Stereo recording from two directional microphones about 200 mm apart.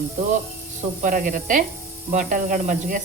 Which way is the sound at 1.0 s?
40° right (ahead or behind).